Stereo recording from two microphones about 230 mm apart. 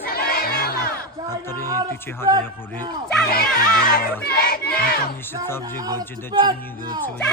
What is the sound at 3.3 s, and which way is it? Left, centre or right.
Speech, left.